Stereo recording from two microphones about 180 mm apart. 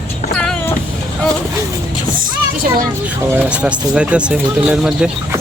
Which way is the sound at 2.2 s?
50° right (ahead or behind).